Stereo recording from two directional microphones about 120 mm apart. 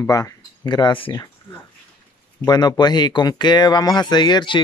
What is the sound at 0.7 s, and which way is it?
Speech, 40° left (ahead or behind).